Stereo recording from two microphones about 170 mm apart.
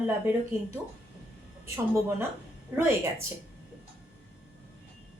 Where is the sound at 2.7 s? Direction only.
10° right (ahead or behind).